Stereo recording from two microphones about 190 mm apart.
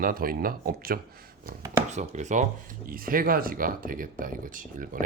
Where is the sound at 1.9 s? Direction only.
35° right (ahead or behind).